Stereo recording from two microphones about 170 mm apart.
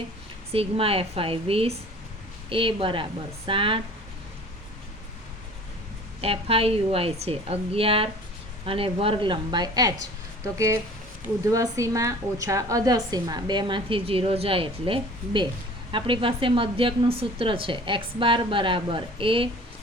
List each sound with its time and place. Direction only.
0.5 s a woman's voice: 35° right (ahead or behind)
6.2 s a woman's voice: 35° right (ahead or behind)